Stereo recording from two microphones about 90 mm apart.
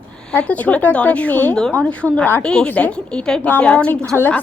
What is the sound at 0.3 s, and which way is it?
A woman's voice, 15° left (ahead or behind).